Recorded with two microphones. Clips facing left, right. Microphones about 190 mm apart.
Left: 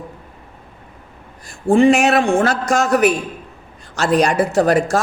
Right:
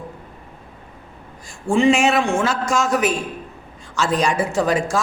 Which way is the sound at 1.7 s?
60° left (ahead or behind).